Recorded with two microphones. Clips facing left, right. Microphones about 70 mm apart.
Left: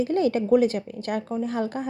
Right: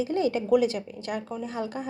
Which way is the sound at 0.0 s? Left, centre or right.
Left.